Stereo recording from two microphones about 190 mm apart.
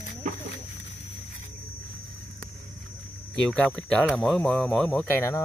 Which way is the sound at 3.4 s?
5° left (ahead or behind).